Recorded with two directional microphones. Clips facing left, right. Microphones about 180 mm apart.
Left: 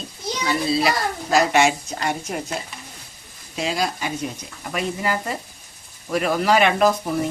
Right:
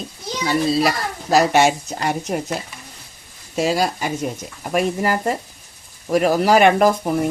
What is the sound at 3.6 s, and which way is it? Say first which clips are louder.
Speech: right 5 dB; 45° right (ahead or behind).